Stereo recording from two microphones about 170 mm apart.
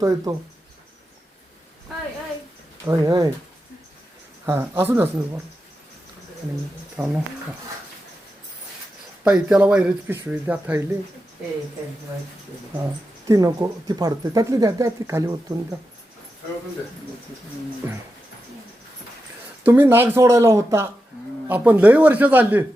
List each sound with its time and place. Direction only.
0.0 s speech: 20° right (ahead or behind)
2.8 s speech: 20° right (ahead or behind)
4.4 s speech: 15° right (ahead or behind)
7.0 s speech: 10° right (ahead or behind)
9.2 s speech: 5° right (ahead or behind)
12.8 s speech: 20° right (ahead or behind)
19.6 s speech: 10° right (ahead or behind)